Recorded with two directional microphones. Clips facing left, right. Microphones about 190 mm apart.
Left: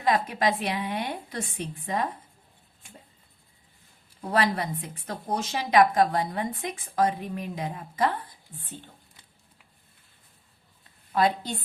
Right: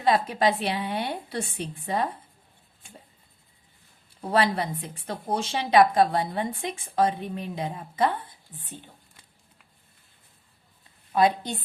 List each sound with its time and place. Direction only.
0.0 s a woman's voice: 30° right (ahead or behind)
4.3 s a woman's voice: 30° right (ahead or behind)
11.1 s a woman's voice: 20° right (ahead or behind)